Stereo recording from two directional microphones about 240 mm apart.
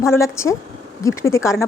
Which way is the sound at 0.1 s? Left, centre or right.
Centre.